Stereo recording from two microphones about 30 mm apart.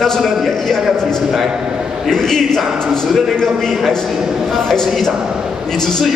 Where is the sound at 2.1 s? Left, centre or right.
Centre.